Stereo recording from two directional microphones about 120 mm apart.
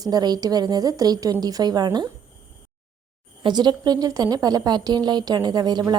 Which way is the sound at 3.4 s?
35° right (ahead or behind).